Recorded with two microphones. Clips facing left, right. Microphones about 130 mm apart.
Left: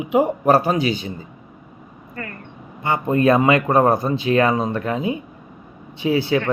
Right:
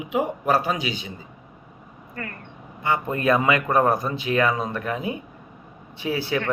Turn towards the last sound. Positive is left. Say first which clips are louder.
# left 6 dB
turn(degrees=20)  # may be behind; listen again after turning